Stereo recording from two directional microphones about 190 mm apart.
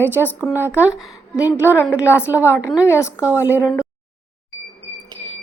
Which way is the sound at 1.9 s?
15° left (ahead or behind).